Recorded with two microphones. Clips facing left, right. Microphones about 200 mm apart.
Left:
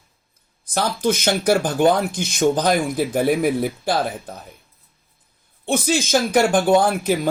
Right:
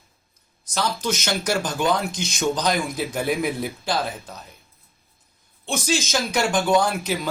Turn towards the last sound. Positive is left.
turn(degrees=50)  # may be behind; listen again after turning